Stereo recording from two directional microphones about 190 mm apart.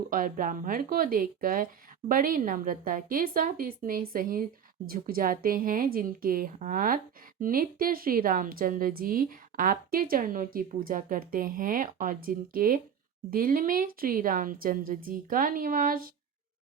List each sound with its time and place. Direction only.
0.1 s a woman's voice: 45° right (ahead or behind)